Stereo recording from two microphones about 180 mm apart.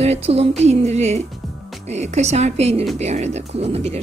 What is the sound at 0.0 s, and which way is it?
A woman's voice, 35° right (ahead or behind).